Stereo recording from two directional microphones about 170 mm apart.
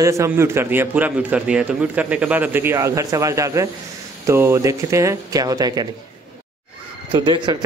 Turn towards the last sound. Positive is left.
turn(degrees=-25)  # may be behind; listen again after turning